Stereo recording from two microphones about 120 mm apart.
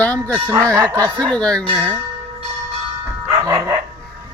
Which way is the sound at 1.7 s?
10° right (ahead or behind).